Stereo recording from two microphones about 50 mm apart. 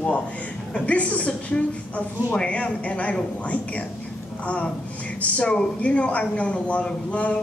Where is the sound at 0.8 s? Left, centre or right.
Left.